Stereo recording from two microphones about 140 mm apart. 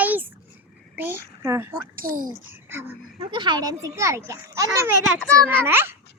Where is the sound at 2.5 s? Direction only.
15° right (ahead or behind).